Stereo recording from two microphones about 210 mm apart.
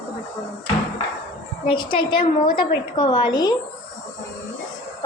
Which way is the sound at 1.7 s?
25° left (ahead or behind).